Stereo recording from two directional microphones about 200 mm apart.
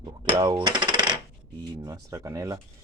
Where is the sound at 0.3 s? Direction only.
20° right (ahead or behind).